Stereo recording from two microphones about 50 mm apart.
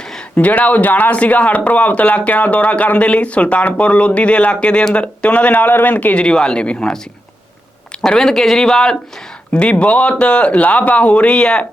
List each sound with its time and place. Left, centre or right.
0.0 s a sound: centre
0.3 s speech: left
1.1 s speech: left
6.1 s speech: centre
8.0 s speech: centre